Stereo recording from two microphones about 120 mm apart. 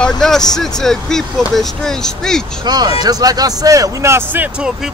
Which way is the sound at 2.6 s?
35° right (ahead or behind).